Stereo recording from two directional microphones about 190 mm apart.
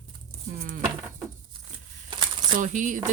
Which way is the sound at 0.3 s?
40° right (ahead or behind).